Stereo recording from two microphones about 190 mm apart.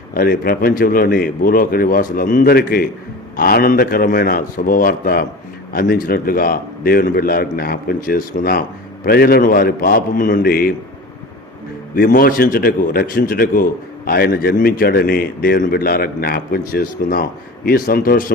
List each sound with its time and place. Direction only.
0.1 s a man's voice: 50° left (ahead or behind)
11.9 s a man's voice: 50° left (ahead or behind)